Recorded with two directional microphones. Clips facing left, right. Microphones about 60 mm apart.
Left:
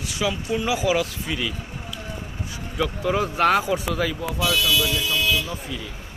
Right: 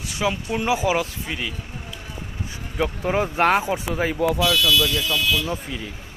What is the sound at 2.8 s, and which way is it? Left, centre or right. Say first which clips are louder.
Speech: right 1 dB; right.